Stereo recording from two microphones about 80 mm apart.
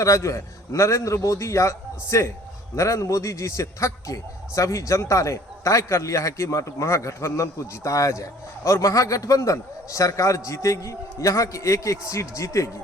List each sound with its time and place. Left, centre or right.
0.0 s a man's voice: left